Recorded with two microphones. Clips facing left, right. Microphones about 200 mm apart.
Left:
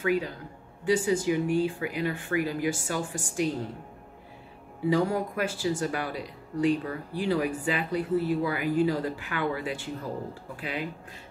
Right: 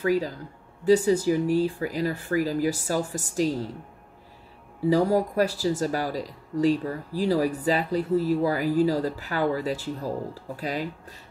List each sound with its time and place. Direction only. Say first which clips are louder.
0.0 s speech: right 3 dB; 35° right (ahead or behind)
4.8 s speech: right 4 dB; 40° right (ahead or behind)